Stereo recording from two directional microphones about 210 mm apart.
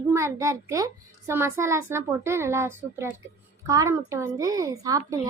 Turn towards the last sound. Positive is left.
turn(degrees=-15)  # may be behind; listen again after turning